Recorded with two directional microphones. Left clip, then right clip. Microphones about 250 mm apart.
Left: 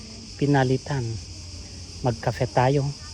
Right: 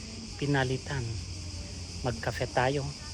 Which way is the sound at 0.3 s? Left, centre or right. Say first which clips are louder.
Left 8 dB; centre.